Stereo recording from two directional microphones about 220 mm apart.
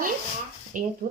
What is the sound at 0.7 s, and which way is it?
Speech, 35° right (ahead or behind).